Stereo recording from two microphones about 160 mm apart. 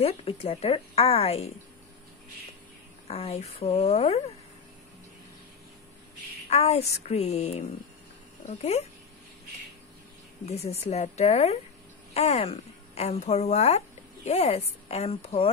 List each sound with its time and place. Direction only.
0.0 s speech: 35° left (ahead or behind)
3.1 s speech: 40° left (ahead or behind)
6.5 s speech: 40° left (ahead or behind)
10.4 s a woman's voice: 40° left (ahead or behind)